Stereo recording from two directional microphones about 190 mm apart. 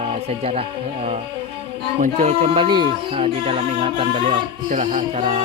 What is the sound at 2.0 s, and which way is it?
Speech, 35° right (ahead or behind).